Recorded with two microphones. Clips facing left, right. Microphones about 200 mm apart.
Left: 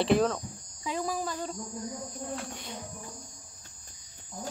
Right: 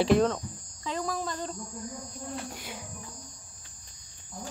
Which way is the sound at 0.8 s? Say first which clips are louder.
Even; 10° left (ahead or behind).